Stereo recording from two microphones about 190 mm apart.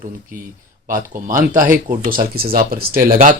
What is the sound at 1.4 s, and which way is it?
Speech, 45° right (ahead or behind).